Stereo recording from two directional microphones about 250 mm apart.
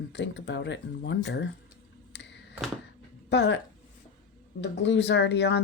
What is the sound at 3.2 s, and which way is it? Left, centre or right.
Speech, left.